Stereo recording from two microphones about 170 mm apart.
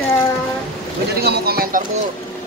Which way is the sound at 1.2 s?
65° right (ahead or behind).